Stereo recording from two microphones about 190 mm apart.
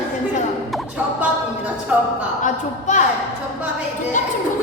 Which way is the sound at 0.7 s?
5° right (ahead or behind).